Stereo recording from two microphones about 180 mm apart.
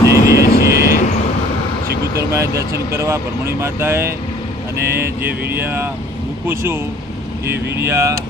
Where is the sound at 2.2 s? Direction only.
15° right (ahead or behind).